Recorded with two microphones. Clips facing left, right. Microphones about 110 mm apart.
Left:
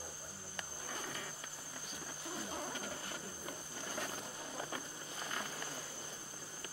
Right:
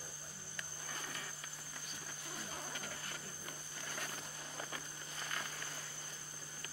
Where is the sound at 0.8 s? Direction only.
25° left (ahead or behind).